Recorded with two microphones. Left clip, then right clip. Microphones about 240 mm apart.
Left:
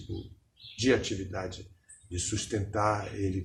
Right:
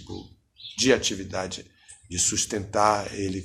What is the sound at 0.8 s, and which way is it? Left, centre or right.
Speech, right.